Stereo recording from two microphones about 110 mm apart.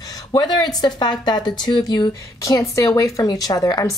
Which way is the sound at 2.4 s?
30° left (ahead or behind).